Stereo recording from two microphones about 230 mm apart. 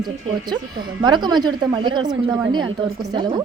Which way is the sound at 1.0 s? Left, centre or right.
Centre.